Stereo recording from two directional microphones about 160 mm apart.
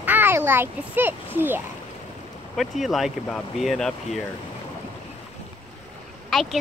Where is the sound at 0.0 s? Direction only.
10° right (ahead or behind).